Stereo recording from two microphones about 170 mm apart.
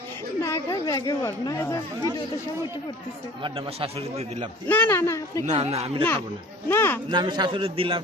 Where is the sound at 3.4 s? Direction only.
30° right (ahead or behind).